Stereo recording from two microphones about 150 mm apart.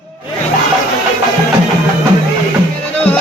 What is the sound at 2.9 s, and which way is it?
Music, 10° left (ahead or behind).